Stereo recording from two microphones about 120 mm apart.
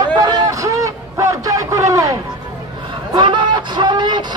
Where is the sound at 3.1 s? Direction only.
40° right (ahead or behind).